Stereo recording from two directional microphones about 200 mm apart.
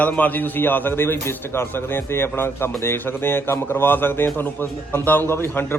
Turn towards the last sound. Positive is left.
turn(degrees=10)  # may be behind; listen again after turning